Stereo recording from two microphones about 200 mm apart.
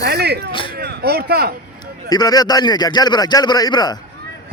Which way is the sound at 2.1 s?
20° left (ahead or behind).